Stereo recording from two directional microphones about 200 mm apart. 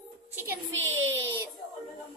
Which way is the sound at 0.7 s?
70° right (ahead or behind).